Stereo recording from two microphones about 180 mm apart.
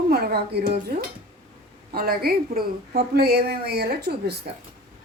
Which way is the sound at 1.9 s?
55° right (ahead or behind).